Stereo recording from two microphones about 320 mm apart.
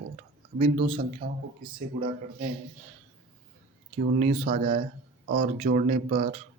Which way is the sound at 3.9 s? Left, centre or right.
Right.